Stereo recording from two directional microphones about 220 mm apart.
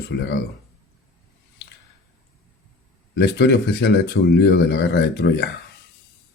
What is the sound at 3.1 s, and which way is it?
Speech, 50° left (ahead or behind).